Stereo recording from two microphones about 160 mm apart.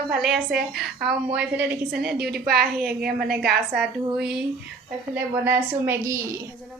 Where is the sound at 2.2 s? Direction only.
80° right.